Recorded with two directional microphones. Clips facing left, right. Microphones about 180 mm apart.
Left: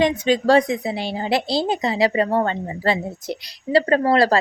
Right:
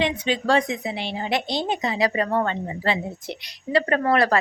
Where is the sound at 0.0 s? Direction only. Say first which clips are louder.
Left 6 dB; 40° left (ahead or behind).